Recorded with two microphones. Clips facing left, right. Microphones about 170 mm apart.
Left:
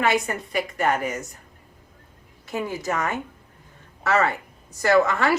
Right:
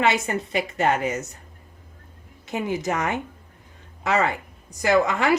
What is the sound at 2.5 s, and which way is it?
A woman's voice, 20° right (ahead or behind).